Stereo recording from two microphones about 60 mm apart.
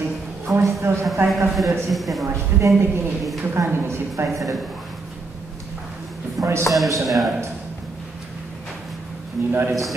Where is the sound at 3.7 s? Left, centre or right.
Right.